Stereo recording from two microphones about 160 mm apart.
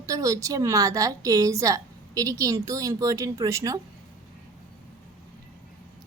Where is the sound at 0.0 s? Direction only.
20° right (ahead or behind).